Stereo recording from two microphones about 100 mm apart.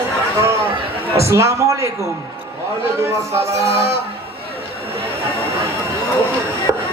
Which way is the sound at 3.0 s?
25° right (ahead or behind).